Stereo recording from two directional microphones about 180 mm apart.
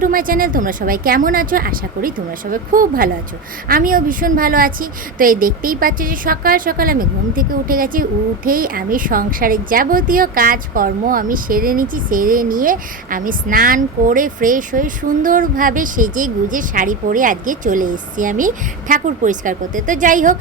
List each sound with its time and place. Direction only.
0.0 s a woman's voice: 50° right (ahead or behind)